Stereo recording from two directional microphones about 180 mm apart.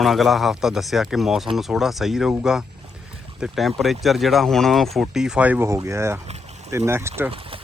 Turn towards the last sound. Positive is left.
turn(degrees=-30)  # may be behind; listen again after turning